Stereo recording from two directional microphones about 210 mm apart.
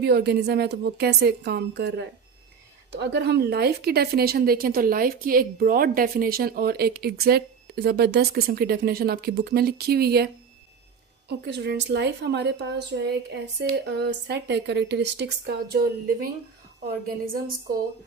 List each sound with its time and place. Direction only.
0.0 s speech: 50° right (ahead or behind)
11.3 s speech: 50° right (ahead or behind)